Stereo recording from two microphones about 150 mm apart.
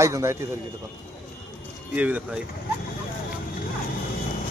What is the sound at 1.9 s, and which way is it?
Speech, 10° right (ahead or behind).